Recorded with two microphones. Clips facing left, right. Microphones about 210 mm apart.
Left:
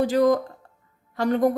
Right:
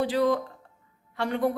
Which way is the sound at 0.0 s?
45° left (ahead or behind).